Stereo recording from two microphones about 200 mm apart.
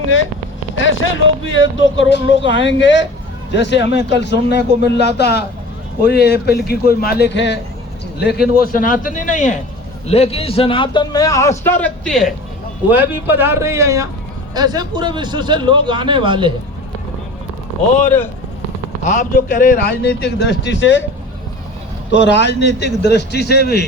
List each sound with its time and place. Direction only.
0.8 s speech: 70° left (ahead or behind)
2.4 s a man's voice: 25° right (ahead or behind)
2.6 s a man's voice: 65° left (ahead or behind)
8.6 s a man's voice: 45° left (ahead or behind); by 12.3 s centre (ahead or behind)
12.9 s a man's voice: 10° right (ahead or behind)
17.9 s speech: 10° left (ahead or behind)
19.0 s speech: 35° left (ahead or behind)
20.0 s a man's voice: 55° left (ahead or behind)
22.1 s a man's voice: 60° left (ahead or behind)